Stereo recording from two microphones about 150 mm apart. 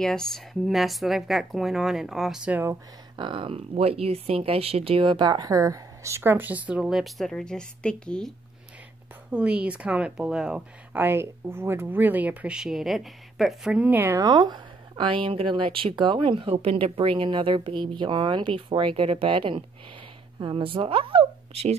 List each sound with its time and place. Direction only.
0.0 s speech: 5° left (ahead or behind); by 2.8 s 15° right (ahead or behind)
3.2 s speech: 35° right (ahead or behind); by 8.3 s 5° left (ahead or behind)
9.3 s speech: 10° right (ahead or behind); by 21.7 s 40° right (ahead or behind)